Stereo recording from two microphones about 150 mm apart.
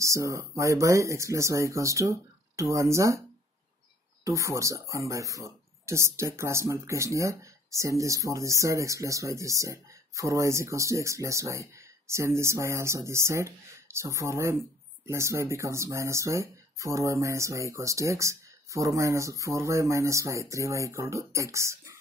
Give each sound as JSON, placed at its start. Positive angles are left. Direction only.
{"t": 0.0, "sound": "speech", "side_deg": -20}
{"t": 4.2, "sound": "speech", "side_deg": -20}